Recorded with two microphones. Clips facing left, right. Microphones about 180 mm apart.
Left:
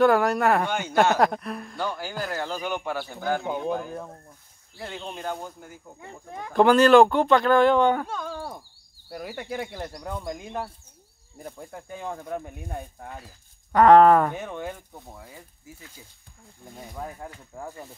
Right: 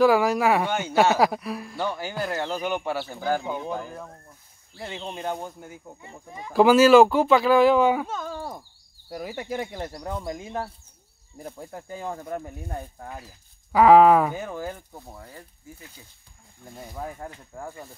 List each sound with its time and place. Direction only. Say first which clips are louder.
0.0 s speech: right 1 dB; centre (ahead or behind)
2.5 s speech: right 2 dB; 15° right (ahead or behind)
5.9 s speech: left 2 dB; 60° left (ahead or behind)
6.5 s speech: right 1 dB; 5° right (ahead or behind)
16.7 s speech: right 1 dB; 5° right (ahead or behind)